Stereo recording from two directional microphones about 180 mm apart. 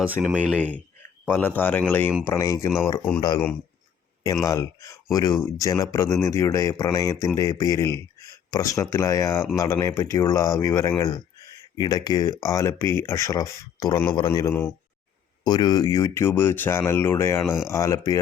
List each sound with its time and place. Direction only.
0.2 s speech: 5° right (ahead or behind)
1.3 s speech: 10° left (ahead or behind)
3.2 s speech: 20° left (ahead or behind)
4.4 s speech: 20° left (ahead or behind)